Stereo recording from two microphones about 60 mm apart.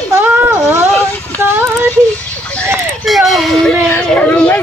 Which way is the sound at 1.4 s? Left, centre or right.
Right.